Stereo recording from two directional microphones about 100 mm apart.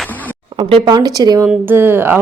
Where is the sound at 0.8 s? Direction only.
40° right (ahead or behind).